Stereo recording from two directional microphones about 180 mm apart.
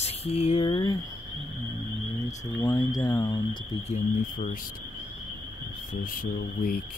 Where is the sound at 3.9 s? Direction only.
40° left (ahead or behind).